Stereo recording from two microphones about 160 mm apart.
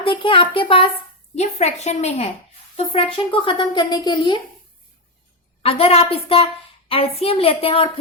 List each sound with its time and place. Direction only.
0.0 s a woman's voice: 35° left (ahead or behind)
1.4 s a woman's voice: 45° left (ahead or behind); by 4.4 s 30° left (ahead or behind)
5.6 s a woman's voice: 35° left (ahead or behind)